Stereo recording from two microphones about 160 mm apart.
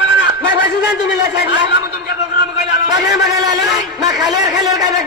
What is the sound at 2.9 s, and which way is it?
A man's voice, 25° right (ahead or behind).